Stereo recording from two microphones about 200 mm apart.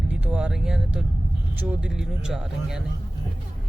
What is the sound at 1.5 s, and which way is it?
Speech, 5° right (ahead or behind).